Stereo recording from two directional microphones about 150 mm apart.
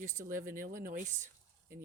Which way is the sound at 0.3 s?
65° right (ahead or behind).